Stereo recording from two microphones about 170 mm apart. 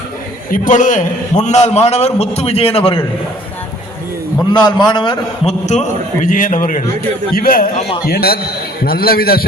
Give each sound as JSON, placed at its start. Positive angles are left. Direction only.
{"t": 0.5, "sound": "a man's voice", "side_deg": 50}
{"t": 4.5, "sound": "a man's voice", "side_deg": 25}
{"t": 6.2, "sound": "a man's voice", "side_deg": 50}